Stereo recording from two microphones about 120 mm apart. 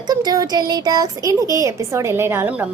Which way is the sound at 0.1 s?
35° right (ahead or behind).